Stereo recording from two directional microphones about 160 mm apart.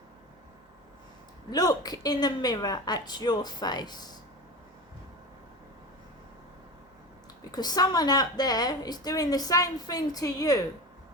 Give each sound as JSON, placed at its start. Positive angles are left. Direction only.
{"t": 1.5, "sound": "a woman's voice", "side_deg": 25}
{"t": 7.5, "sound": "a woman's voice", "side_deg": 25}